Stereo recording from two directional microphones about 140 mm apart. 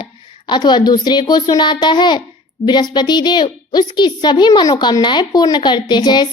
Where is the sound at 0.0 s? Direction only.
35° left (ahead or behind).